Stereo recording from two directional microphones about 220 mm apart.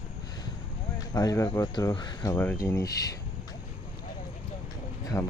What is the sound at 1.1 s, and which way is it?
Speech, 15° left (ahead or behind).